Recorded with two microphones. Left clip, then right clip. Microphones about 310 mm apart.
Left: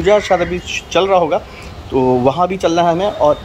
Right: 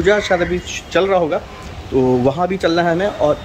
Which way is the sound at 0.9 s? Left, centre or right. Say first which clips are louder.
Left 2 dB; centre.